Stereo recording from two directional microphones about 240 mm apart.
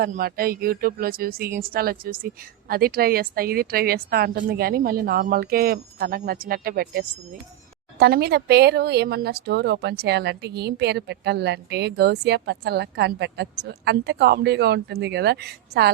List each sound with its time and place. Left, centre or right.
0.0 s a woman's voice: right